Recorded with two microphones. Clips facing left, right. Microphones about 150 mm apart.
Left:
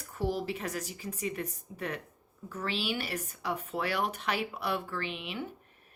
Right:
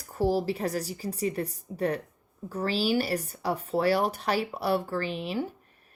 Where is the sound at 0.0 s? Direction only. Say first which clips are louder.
Right 7 dB; 35° right (ahead or behind).